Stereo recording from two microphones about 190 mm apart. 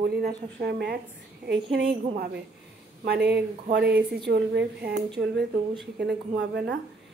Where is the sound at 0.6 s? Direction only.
60° right (ahead or behind).